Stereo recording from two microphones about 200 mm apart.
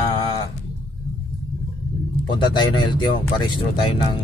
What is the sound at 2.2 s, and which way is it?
Speech, 25° left (ahead or behind).